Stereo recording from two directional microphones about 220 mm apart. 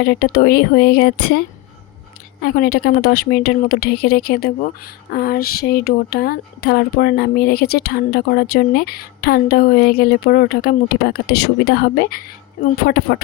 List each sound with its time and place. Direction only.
0.0 s speech: 45° left (ahead or behind)
2.4 s speech: 45° left (ahead or behind)